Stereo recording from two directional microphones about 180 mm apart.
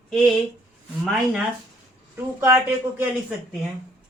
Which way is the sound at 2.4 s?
10° right (ahead or behind).